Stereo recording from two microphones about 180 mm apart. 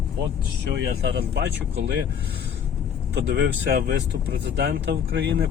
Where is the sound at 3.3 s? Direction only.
65° right (ahead or behind).